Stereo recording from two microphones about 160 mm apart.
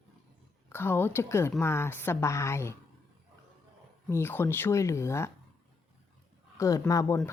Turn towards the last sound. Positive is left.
turn(degrees=20)  # may be behind; listen again after turning